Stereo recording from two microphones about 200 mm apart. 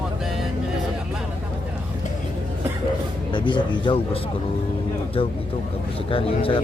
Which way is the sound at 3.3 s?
25° left (ahead or behind).